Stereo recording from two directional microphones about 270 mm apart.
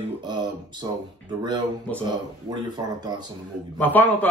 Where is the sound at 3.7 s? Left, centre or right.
Centre.